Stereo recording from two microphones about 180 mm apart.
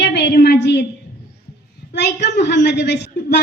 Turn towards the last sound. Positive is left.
turn(degrees=80)